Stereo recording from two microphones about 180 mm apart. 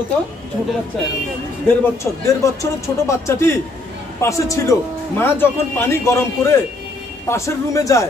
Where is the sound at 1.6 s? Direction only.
15° left (ahead or behind).